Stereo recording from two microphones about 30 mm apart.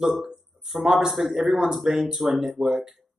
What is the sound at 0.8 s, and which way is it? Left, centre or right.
Speech, centre.